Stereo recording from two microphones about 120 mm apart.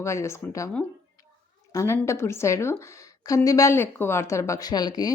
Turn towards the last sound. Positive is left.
turn(degrees=35)  # may be behind; listen again after turning